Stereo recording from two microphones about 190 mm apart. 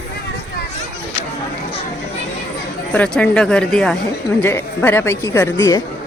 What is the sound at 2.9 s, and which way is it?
A woman's voice, 5° left (ahead or behind).